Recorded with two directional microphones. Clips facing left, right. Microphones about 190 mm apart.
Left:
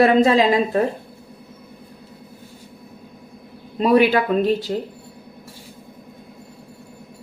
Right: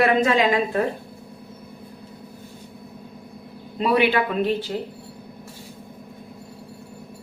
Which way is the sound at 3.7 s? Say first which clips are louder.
Left 4 dB; 40° left (ahead or behind).